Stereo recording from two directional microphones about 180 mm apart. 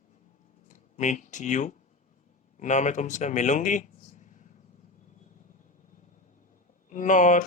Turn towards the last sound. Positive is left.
turn(degrees=45)  # may be behind; listen again after turning